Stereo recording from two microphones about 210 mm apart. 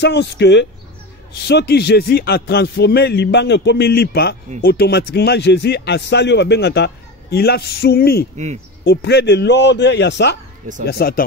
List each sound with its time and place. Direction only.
0.0 s a man's voice: 55° left (ahead or behind)